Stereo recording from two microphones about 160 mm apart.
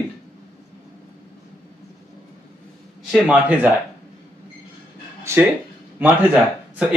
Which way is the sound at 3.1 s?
5° right (ahead or behind).